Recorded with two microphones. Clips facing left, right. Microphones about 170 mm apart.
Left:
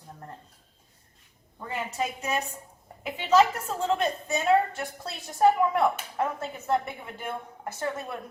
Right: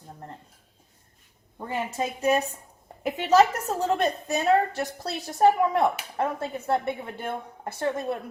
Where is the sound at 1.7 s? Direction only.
30° right (ahead or behind).